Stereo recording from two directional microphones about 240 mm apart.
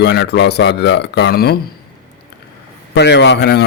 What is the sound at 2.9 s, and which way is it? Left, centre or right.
Speech, left.